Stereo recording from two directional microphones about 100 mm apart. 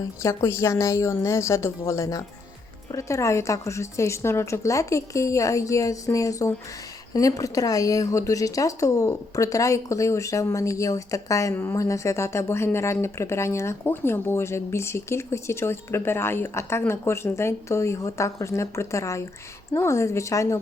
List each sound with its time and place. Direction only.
0.2 s a woman's voice: 25° left (ahead or behind)